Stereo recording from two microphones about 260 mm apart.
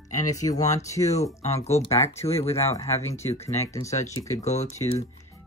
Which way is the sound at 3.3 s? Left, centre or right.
Left.